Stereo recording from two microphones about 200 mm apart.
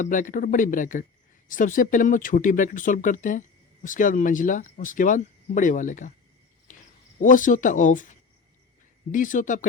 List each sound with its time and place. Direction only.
0.0 s speech: 40° left (ahead or behind)
7.2 s speech: 40° left (ahead or behind)
9.1 s speech: 40° left (ahead or behind)